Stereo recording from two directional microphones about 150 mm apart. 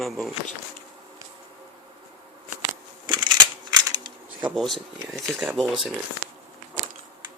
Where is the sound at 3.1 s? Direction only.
30° right (ahead or behind).